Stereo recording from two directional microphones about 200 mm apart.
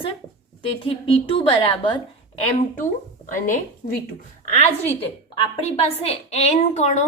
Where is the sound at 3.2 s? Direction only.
40° left (ahead or behind).